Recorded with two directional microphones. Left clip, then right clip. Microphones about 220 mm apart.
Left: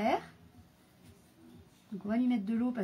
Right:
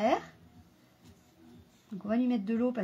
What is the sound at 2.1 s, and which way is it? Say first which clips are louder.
Speech: right 2 dB; 30° right (ahead or behind).